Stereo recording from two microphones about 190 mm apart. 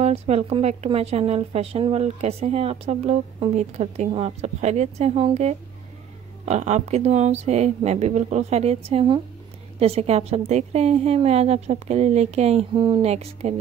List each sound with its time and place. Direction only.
0.0 s speech: 35° right (ahead or behind)